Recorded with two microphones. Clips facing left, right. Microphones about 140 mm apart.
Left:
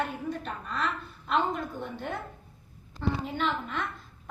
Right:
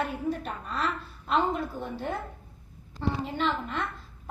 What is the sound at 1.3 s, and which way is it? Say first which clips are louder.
Speech: right 2 dB; 30° right (ahead or behind).